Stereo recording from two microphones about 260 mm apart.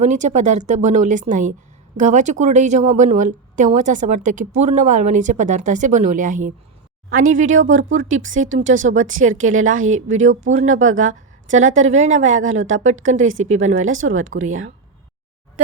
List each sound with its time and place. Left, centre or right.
0.0 s a woman's voice: right
13.9 s speech: right